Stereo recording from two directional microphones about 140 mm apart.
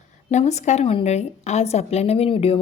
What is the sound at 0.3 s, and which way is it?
Speech, 55° left (ahead or behind).